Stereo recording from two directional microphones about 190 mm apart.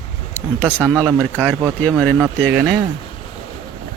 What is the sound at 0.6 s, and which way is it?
Speech, 15° right (ahead or behind).